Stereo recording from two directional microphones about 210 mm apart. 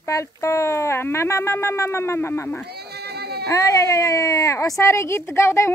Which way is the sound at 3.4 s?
15° left (ahead or behind).